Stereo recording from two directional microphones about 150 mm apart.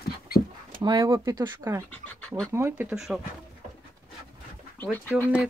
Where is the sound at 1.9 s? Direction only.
10° left (ahead or behind).